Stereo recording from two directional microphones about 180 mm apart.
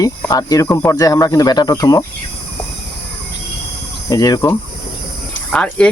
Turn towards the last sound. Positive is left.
turn(degrees=5)  # may be behind; listen again after turning